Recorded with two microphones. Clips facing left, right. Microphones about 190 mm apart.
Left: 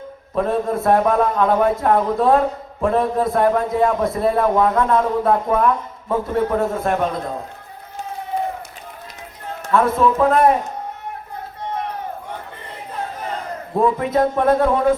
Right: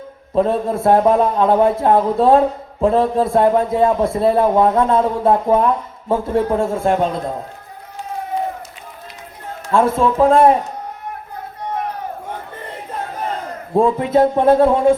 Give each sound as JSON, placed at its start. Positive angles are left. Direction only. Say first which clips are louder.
{"t": 0.3, "sound": "a man's voice", "louder": "right 3 dB", "side_deg": -30}
{"t": 9.7, "sound": "a man's voice", "louder": "right 2 dB", "side_deg": -25}
{"t": 13.7, "sound": "a man's voice", "louder": "right 3 dB", "side_deg": -25}